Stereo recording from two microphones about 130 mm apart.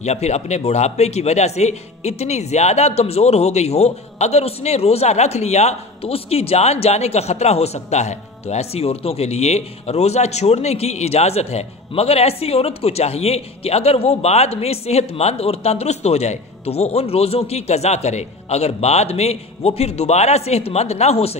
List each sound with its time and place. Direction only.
0.0 s a man's voice: 60° left (ahead or behind)